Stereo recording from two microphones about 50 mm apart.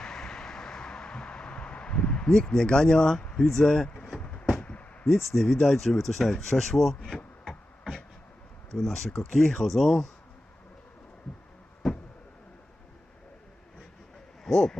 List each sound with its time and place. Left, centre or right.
0.0 s vehicle: centre
3.3 s speech: centre
3.9 s vehicle: centre
4.2 s vehicle: left
4.6 s a sound: left
5.0 s speech: centre
7.4 s a sound: centre
8.7 s speech: centre
11.8 s a sound: centre
14.4 s speech: centre